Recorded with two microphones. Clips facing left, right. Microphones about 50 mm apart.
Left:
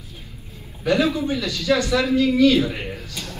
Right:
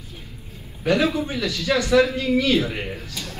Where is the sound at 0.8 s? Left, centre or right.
Right.